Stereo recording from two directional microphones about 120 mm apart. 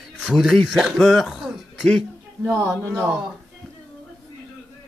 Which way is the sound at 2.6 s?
25° right (ahead or behind).